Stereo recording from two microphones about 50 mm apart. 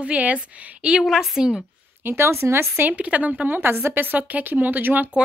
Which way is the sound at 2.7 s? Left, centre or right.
Right.